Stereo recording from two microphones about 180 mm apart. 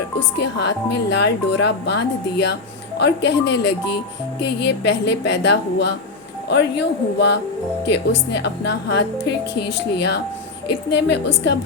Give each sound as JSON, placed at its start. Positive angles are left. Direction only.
{"t": 0.3, "sound": "speech", "side_deg": 70}